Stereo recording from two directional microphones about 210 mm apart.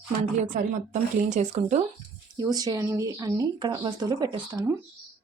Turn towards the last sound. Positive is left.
turn(degrees=-20)  # may be behind; listen again after turning